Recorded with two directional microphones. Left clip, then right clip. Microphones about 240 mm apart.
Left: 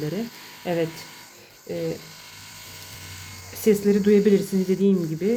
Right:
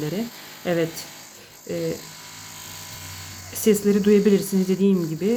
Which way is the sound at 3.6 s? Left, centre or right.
Centre.